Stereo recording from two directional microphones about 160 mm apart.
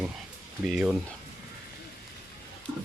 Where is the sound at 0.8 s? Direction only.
5° right (ahead or behind).